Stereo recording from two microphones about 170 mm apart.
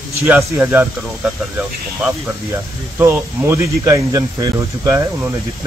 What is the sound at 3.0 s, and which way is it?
Speech, 15° right (ahead or behind).